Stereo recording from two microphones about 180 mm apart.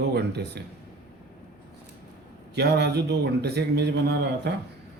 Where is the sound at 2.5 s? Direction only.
70° right (ahead or behind).